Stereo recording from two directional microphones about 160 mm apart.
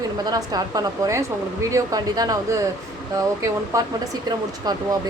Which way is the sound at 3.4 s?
20° right (ahead or behind).